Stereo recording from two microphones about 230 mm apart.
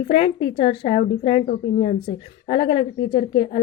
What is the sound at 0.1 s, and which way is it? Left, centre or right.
A woman's voice, left.